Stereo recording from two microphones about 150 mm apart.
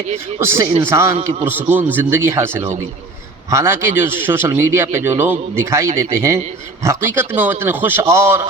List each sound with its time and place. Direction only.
0.3 s a man's voice: 15° right (ahead or behind)